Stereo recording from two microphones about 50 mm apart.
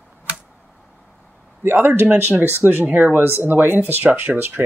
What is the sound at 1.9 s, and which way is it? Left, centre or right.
Speech, right.